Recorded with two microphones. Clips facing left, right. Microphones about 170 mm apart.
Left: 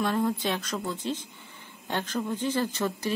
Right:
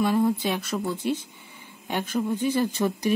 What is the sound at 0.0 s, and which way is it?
A woman's voice, 10° right (ahead or behind).